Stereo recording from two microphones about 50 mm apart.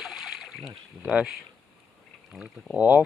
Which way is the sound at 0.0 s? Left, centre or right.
Centre.